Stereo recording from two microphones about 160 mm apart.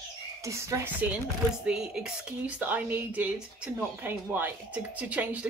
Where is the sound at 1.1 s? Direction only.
5° right (ahead or behind).